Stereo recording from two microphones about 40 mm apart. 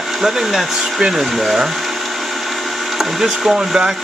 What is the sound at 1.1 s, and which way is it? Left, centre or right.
Speech, centre.